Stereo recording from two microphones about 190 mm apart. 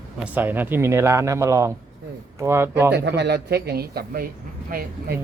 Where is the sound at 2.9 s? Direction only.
65° right (ahead or behind).